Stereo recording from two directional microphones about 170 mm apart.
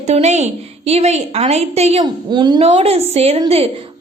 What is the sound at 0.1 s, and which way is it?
A woman's voice, 40° right (ahead or behind).